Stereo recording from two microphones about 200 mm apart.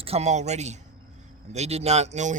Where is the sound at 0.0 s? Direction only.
30° right (ahead or behind).